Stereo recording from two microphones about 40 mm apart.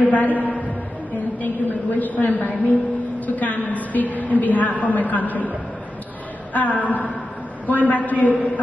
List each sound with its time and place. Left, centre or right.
0.1 s a man's voice: left
6.5 s a woman's voice: left